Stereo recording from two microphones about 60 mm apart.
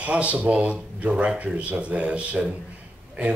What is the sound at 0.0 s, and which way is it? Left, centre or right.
Speech, right.